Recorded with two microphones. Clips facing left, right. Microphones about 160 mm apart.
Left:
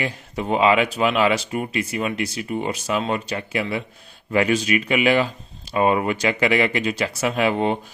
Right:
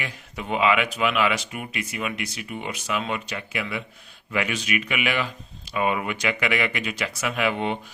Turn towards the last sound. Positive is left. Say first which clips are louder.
# left 5 dB
turn(degrees=35)  # may be behind; listen again after turning